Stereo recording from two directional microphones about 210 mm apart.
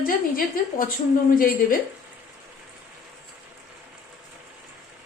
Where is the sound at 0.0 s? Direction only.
45° left (ahead or behind).